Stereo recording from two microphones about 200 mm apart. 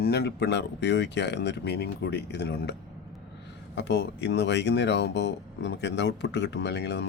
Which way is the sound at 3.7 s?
60° left (ahead or behind).